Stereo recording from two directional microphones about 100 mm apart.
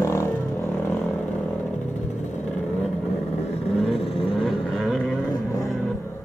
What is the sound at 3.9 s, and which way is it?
Vehicle, 70° left (ahead or behind).